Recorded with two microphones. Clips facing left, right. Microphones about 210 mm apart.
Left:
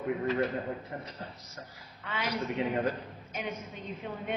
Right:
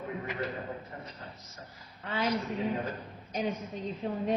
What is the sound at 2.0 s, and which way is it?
A woman's voice, 35° right (ahead or behind).